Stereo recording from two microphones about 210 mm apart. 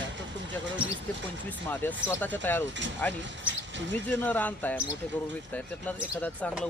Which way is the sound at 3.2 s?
60° right (ahead or behind).